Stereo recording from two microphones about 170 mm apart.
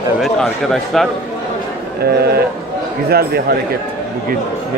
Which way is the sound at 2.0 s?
70° right (ahead or behind).